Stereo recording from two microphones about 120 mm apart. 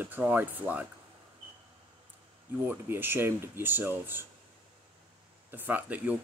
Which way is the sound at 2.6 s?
15° right (ahead or behind).